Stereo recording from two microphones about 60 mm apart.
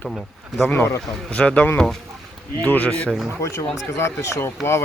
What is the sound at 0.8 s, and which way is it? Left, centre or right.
Speech, left.